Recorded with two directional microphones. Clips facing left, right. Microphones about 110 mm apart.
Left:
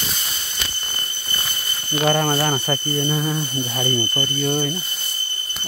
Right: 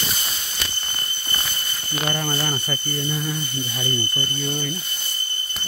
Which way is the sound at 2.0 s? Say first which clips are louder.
Left 7 dB; 60° left (ahead or behind).